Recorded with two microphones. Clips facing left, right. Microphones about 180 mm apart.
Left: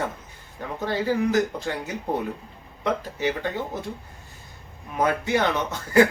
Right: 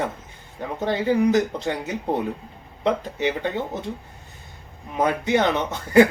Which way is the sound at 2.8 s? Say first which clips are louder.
Right 3 dB; 20° right (ahead or behind).